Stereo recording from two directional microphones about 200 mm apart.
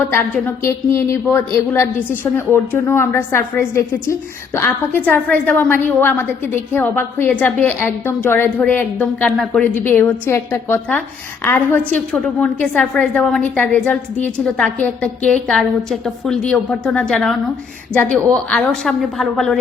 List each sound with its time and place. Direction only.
0.0 s a woman's voice: 10° left (ahead or behind)